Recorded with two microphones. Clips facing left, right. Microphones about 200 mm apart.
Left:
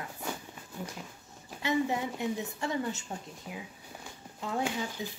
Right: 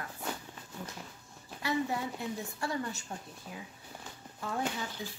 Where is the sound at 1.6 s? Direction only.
20° left (ahead or behind).